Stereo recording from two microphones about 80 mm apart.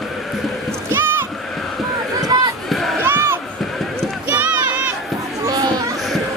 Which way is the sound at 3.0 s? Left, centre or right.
Right.